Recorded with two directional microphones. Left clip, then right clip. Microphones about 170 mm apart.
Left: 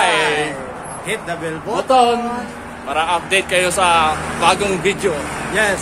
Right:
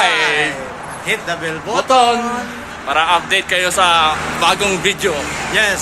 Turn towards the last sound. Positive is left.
turn(degrees=30)  # may be behind; listen again after turning